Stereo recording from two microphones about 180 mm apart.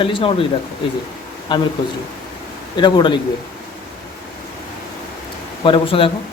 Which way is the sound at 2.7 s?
25° left (ahead or behind).